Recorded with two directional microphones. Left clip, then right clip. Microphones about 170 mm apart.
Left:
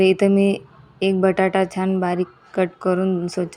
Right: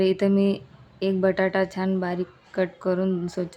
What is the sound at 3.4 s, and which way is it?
Speech, 10° left (ahead or behind).